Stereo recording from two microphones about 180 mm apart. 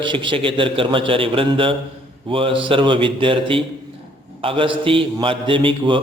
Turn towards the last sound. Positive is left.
turn(degrees=-30)  # may be behind; listen again after turning